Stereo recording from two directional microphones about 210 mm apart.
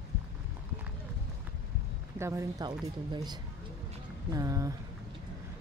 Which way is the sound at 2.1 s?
15° right (ahead or behind).